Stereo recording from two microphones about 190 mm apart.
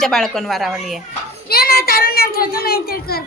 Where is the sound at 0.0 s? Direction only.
Centre (ahead or behind).